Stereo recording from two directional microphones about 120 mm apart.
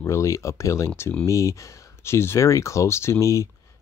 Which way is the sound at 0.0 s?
25° left (ahead or behind).